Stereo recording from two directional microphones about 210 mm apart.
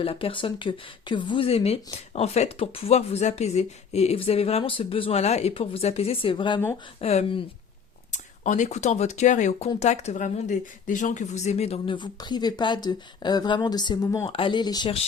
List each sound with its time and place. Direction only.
0.0 s speech: 25° left (ahead or behind)